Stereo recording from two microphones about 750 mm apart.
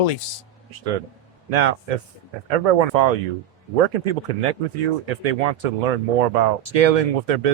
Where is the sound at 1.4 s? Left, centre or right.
Right.